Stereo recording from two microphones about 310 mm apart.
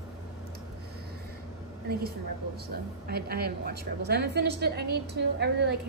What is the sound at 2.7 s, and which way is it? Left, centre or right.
A woman's voice, right.